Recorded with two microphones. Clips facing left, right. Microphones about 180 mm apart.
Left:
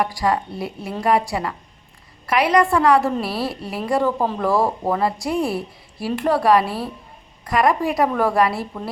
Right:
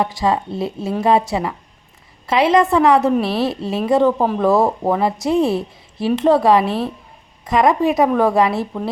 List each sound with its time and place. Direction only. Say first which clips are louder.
0.0 s a woman's voice: right 2 dB; 25° right (ahead or behind)